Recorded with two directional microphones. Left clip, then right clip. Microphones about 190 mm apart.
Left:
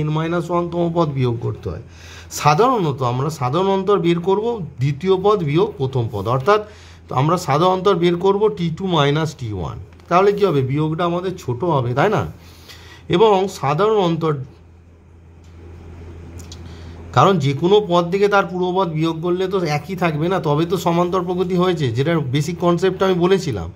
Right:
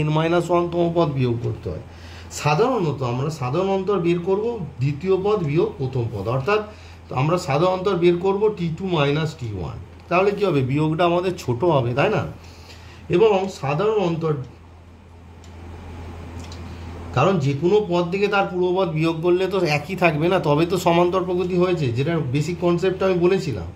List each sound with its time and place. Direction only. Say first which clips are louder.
0.0 s a man's voice: right 2 dB; 25° left (ahead or behind)
2.4 s a man's voice: left 5 dB; 45° left (ahead or behind)
17.1 s a man's voice: left 5 dB; 45° left (ahead or behind)